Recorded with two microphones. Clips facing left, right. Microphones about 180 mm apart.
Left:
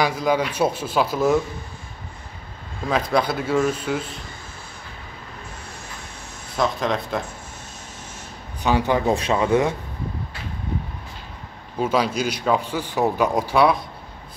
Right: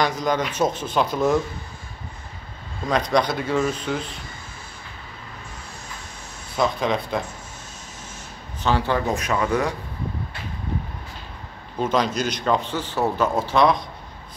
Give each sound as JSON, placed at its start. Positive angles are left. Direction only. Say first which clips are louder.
{"t": 0.0, "sound": "speech", "louder": "left 2 dB", "side_deg": 5}
{"t": 2.9, "sound": "speech", "louder": "even", "side_deg": 5}
{"t": 6.5, "sound": "speech", "louder": "even", "side_deg": 0}
{"t": 8.6, "sound": "speech", "louder": "left 2 dB", "side_deg": 15}
{"t": 9.0, "sound": "speech", "louder": "left 3 dB", "side_deg": 30}
{"t": 11.8, "sound": "speech", "louder": "left 1 dB", "side_deg": 10}